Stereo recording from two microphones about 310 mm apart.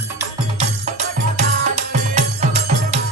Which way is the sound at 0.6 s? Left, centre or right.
Right.